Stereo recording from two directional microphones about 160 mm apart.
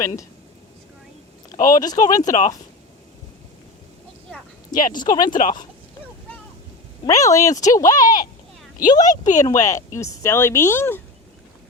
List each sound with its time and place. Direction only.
1.5 s speech: 55° left (ahead or behind)
4.7 s speech: 55° left (ahead or behind)
4.9 s speech: 25° left (ahead or behind)
5.2 s speech: 55° left (ahead or behind)
7.0 s speech: 20° left (ahead or behind)
9.2 s speech: 50° left (ahead or behind)
9.5 s speech: 20° left (ahead or behind)